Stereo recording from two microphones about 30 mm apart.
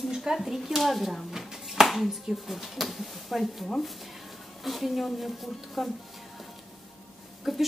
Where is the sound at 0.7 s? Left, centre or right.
Centre.